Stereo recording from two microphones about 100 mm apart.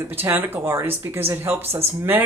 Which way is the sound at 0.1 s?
20° right (ahead or behind).